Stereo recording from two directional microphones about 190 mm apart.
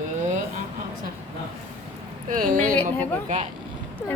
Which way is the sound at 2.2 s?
45° right (ahead or behind).